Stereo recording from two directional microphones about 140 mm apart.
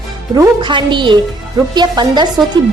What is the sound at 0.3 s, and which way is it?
A woman's voice, 35° right (ahead or behind).